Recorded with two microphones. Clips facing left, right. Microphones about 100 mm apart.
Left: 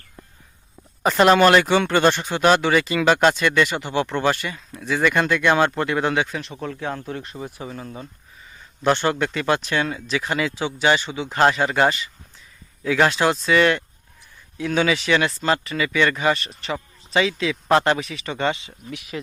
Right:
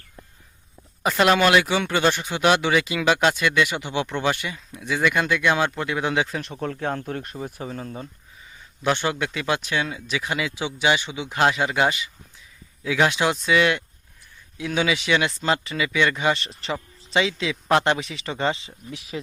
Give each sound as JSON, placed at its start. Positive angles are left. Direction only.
{"t": 1.3, "sound": "speech", "side_deg": 40}
{"t": 1.5, "sound": "speech", "side_deg": -10}
{"t": 6.6, "sound": "speech", "side_deg": -45}
{"t": 7.3, "sound": "speech", "side_deg": 20}
{"t": 9.0, "sound": "speech", "side_deg": -10}